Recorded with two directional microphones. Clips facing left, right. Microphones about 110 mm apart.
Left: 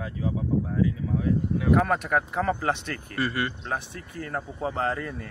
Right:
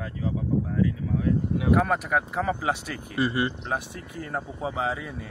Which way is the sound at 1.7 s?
5° right (ahead or behind).